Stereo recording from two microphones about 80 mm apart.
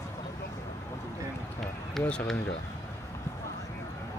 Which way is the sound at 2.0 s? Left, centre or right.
Centre.